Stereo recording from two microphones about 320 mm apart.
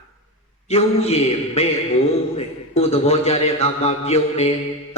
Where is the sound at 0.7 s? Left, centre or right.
Centre.